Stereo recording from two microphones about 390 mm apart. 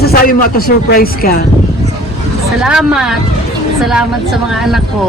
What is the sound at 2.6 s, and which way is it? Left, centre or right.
Speech, centre.